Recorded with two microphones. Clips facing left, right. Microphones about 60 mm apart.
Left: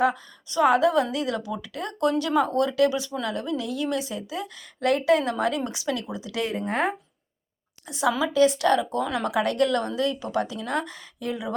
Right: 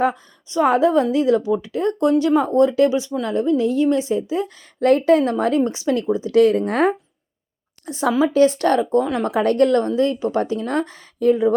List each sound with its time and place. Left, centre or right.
0.0 s a woman's voice: right
6.7 s speech: right
7.9 s a woman's voice: right